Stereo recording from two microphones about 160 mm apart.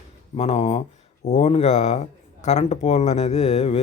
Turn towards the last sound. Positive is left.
turn(degrees=40)  # may be behind; listen again after turning